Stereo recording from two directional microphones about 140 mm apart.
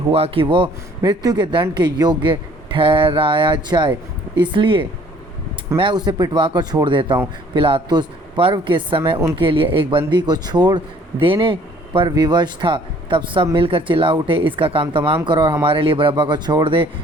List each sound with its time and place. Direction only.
0.1 s speech: 40° right (ahead or behind)